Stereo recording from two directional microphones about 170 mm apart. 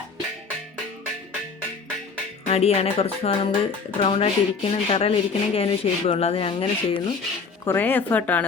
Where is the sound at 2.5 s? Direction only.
35° left (ahead or behind).